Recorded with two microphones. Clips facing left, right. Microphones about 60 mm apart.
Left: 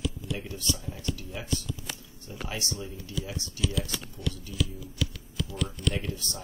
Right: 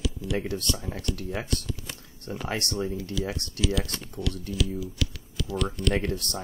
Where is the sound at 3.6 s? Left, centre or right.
Right.